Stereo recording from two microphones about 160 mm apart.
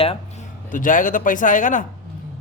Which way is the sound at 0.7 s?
55° left (ahead or behind).